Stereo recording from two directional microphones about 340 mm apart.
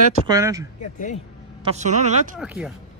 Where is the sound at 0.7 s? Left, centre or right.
Left.